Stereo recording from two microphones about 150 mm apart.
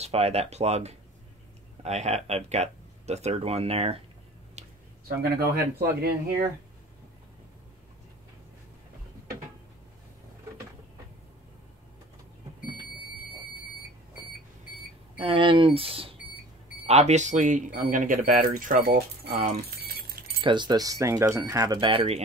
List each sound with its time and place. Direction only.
0.0 s speech: 45° right (ahead or behind)
4.6 s a sound: 50° right (ahead or behind)
5.0 s speech: 90° right
15.1 s speech: 35° right (ahead or behind); by 19.3 s 90° right
19.8 s keys jangling: 90° right
20.3 s speech: 30° right (ahead or behind)